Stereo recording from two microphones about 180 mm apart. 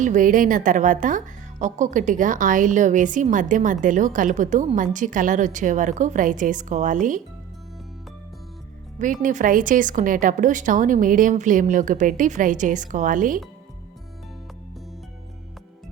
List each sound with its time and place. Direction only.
0.0 s a woman's voice: 45° right (ahead or behind)
9.0 s a woman's voice: 45° right (ahead or behind)